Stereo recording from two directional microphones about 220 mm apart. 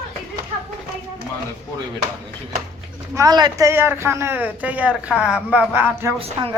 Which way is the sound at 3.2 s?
20° right (ahead or behind).